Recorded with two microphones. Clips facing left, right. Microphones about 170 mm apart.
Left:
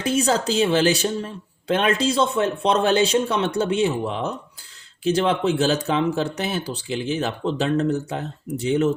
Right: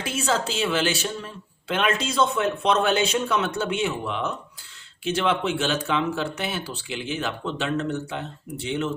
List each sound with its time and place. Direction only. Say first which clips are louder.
0.0 s speech: left 5 dB; 40° left (ahead or behind)